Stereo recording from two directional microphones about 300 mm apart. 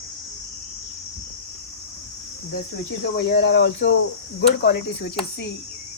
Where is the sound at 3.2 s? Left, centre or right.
Left.